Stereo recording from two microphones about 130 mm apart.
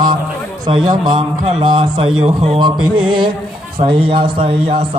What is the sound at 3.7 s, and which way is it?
Speech, 40° right (ahead or behind).